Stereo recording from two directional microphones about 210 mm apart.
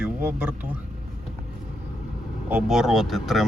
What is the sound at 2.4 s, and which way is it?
Speech, 5° right (ahead or behind).